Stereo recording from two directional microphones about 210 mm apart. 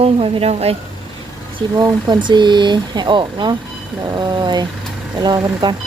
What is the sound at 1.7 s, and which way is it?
Speech, 20° right (ahead or behind).